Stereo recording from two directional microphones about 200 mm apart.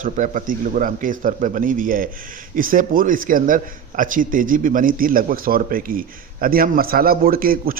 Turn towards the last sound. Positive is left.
turn(degrees=-45)  # may be behind; listen again after turning